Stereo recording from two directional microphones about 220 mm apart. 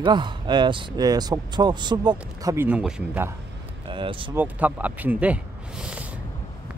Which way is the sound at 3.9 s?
25° right (ahead or behind).